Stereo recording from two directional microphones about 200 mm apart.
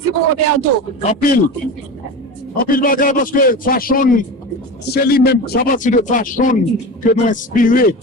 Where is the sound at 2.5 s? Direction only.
45° left (ahead or behind).